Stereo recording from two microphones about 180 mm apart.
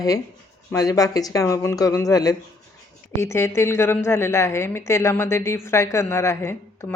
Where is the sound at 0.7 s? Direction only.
20° left (ahead or behind).